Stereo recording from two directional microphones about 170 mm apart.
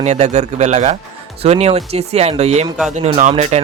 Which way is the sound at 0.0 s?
45° right (ahead or behind).